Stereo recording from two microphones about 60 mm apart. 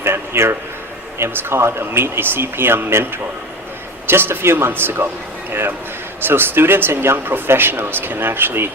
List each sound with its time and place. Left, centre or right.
0.0 s a man's voice: right